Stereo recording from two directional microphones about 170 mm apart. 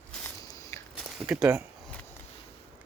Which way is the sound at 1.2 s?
10° right (ahead or behind).